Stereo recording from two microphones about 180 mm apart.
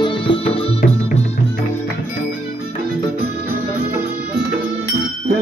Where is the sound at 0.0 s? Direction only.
30° left (ahead or behind).